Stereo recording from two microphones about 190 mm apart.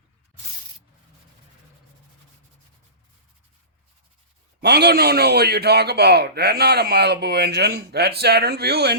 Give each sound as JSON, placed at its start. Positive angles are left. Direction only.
{"t": 4.6, "sound": "a man's voice", "side_deg": -60}